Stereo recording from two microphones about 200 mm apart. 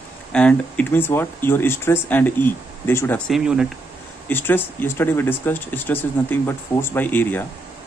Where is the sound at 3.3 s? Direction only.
Centre (ahead or behind).